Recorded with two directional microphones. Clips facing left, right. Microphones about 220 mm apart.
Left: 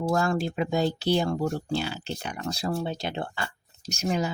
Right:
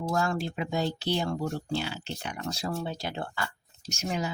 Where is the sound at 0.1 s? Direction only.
40° left (ahead or behind).